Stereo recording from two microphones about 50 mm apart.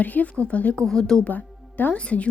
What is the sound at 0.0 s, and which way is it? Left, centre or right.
Speech, left.